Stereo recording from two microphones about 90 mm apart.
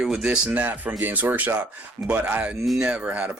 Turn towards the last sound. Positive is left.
turn(degrees=-15)  # may be behind; listen again after turning